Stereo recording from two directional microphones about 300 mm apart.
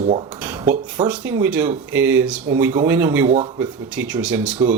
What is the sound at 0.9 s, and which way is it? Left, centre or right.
Speech, centre.